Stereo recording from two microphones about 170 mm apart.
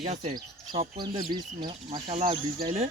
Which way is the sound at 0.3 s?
25° right (ahead or behind).